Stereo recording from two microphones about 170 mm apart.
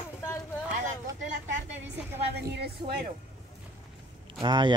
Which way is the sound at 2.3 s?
70° right (ahead or behind).